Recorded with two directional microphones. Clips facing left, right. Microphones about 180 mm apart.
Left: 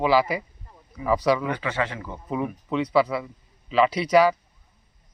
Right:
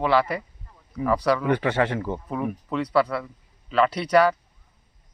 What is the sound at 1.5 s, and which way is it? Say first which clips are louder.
Speech: right 5 dB; 55° right (ahead or behind).